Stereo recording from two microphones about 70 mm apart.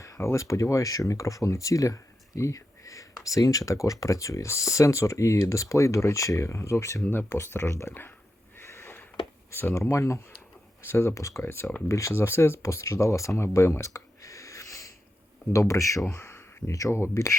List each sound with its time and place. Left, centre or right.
0.0 s speech: left
7.0 s speech: left
8.5 s sniff: left
9.5 s speech: left
12.1 s speech: left
16.0 s a sound: left
16.7 s speech: left